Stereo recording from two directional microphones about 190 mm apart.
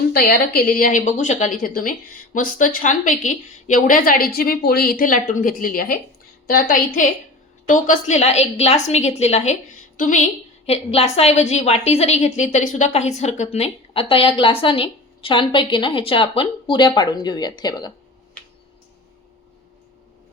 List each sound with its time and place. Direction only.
0.1 s a woman's voice: 55° left (ahead or behind); by 17.9 s 20° left (ahead or behind)